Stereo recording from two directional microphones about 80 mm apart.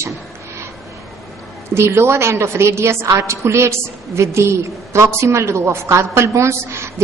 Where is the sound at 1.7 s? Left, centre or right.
Right.